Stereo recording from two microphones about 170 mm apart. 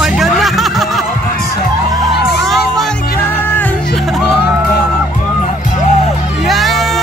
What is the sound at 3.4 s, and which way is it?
Music, 10° left (ahead or behind).